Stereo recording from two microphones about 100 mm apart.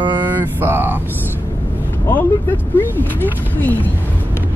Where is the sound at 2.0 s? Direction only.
20° left (ahead or behind).